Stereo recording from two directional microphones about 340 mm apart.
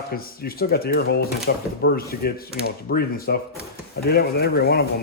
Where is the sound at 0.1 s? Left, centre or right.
Left.